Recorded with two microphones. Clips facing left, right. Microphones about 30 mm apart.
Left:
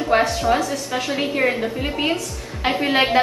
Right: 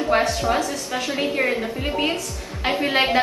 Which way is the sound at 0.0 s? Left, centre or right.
Centre.